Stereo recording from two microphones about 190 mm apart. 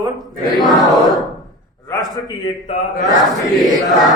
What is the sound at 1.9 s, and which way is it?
Speech, 20° left (ahead or behind).